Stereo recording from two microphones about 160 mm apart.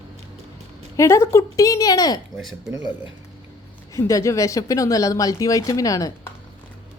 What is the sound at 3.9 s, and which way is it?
Speech, 20° left (ahead or behind).